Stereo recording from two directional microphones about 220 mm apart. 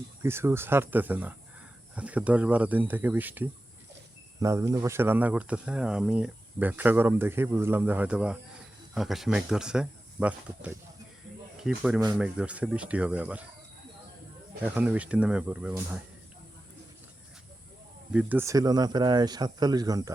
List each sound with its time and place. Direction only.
0.2 s speech: 10° right (ahead or behind)
11.9 s speech: 15° right (ahead or behind)
14.6 s speech: 5° right (ahead or behind)
18.1 s speech: 5° right (ahead or behind)